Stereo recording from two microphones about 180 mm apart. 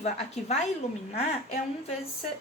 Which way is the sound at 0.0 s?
35° left (ahead or behind).